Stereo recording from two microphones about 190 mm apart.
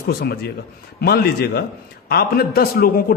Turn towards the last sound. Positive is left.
turn(degrees=50)  # may be behind; listen again after turning